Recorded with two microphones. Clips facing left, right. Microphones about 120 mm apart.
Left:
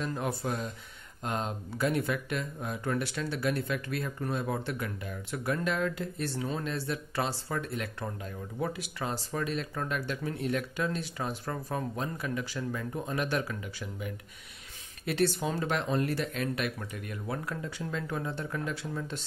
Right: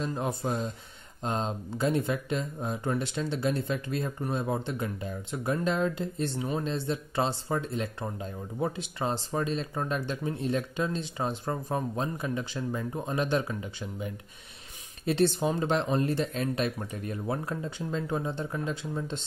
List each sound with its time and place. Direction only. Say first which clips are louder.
0.0 s speech: right 2 dB; 25° right (ahead or behind)